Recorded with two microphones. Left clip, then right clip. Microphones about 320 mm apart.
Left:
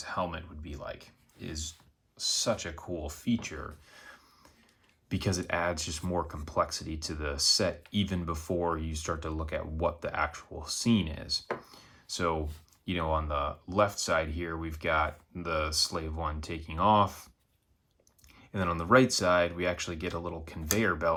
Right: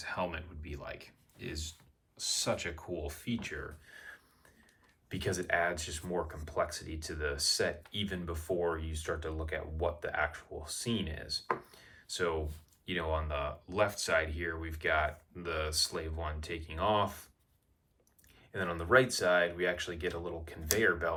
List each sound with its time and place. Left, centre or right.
0.0 s speech: centre
5.0 s speech: centre
11.7 s chopping: centre
12.8 s speech: centre
18.6 s speech: centre